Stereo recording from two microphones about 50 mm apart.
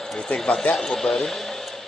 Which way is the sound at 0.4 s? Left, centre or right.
Centre.